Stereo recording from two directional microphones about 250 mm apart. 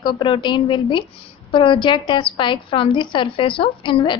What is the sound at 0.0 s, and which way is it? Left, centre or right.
A woman's voice, centre.